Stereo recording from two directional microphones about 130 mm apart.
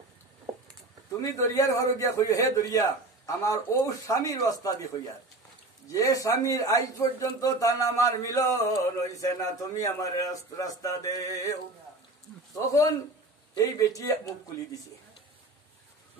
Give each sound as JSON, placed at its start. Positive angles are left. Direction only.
{"t": 1.2, "sound": "speech", "side_deg": 25}
{"t": 12.5, "sound": "speech", "side_deg": 25}